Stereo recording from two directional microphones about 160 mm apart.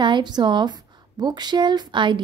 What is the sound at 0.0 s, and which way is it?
A woman's voice, 30° right (ahead or behind).